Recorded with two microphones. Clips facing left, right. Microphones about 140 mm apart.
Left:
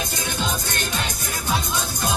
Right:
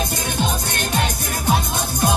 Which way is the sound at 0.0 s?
55° right (ahead or behind).